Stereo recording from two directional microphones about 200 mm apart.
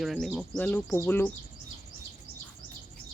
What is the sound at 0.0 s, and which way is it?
Speech, centre (ahead or behind).